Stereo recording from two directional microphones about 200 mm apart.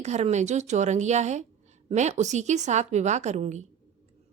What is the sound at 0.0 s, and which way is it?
A woman's voice, 35° right (ahead or behind).